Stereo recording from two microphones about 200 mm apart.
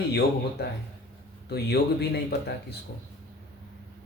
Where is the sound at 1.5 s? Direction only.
55° left (ahead or behind).